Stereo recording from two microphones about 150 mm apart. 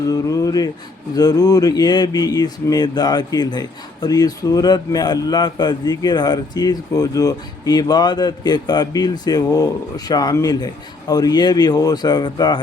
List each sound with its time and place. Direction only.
0.1 s speech: 25° left (ahead or behind)